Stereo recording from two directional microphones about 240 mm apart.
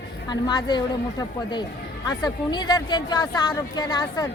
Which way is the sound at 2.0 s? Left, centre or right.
Centre.